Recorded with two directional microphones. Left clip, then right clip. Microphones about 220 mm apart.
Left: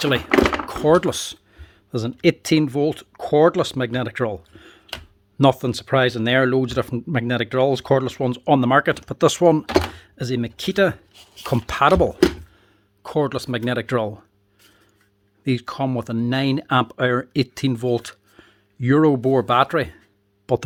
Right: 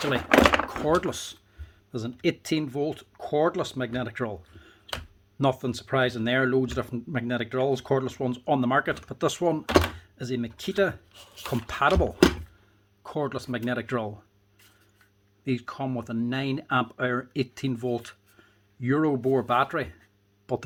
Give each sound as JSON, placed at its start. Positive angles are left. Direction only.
{"t": 0.7, "sound": "speech", "side_deg": 45}
{"t": 15.4, "sound": "speech", "side_deg": 45}